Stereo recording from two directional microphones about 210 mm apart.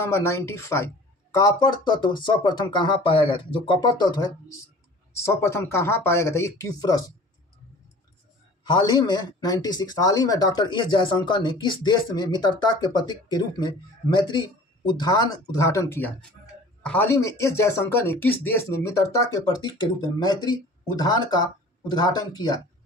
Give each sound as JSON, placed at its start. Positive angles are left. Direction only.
{"t": 0.0, "sound": "speech", "side_deg": 15}
{"t": 8.6, "sound": "speech", "side_deg": 20}